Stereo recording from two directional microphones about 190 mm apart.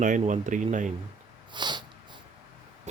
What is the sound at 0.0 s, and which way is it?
Speech, 40° right (ahead or behind).